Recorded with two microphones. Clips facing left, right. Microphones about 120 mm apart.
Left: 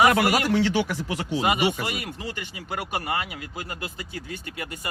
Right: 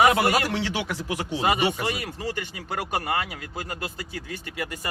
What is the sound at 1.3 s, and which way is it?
Speech, 30° right (ahead or behind).